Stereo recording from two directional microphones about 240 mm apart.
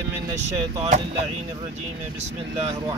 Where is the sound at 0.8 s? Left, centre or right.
Right.